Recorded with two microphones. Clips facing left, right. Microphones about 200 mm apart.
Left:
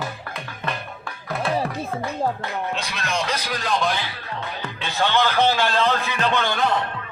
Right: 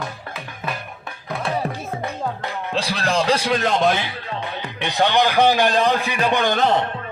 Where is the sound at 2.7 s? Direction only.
30° right (ahead or behind).